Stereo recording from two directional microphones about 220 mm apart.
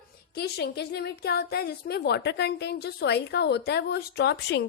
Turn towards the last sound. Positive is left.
turn(degrees=50)  # may be behind; listen again after turning